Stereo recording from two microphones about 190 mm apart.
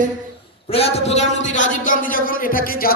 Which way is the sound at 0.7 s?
30° left (ahead or behind).